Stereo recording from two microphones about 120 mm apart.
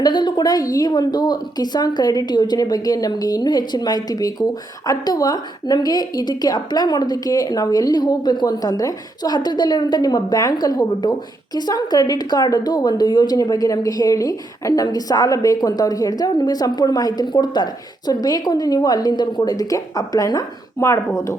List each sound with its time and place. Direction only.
0.0 s a woman's voice: 40° left (ahead or behind)